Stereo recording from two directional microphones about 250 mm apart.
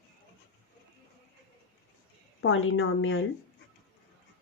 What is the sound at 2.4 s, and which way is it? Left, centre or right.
Speech, left.